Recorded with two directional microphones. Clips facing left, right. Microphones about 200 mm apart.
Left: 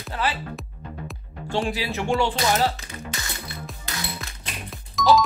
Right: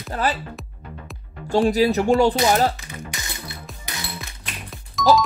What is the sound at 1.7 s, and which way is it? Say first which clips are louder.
Speech: right 8 dB; 40° right (ahead or behind).